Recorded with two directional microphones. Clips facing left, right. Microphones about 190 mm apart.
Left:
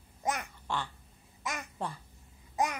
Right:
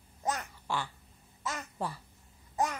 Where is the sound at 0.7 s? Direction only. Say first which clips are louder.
Right 1 dB; 10° right (ahead or behind).